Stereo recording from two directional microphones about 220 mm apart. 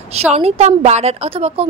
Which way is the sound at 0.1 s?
30° right (ahead or behind).